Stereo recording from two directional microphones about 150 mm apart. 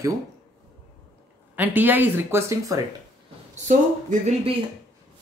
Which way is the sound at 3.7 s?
55° right (ahead or behind).